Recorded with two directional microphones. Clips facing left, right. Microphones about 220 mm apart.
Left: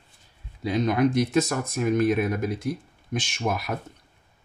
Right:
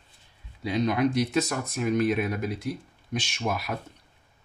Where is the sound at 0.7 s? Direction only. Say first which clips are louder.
Left 2 dB; 50° left (ahead or behind).